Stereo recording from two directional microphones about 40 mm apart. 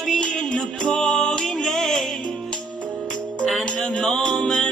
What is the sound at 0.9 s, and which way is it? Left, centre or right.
Music, centre.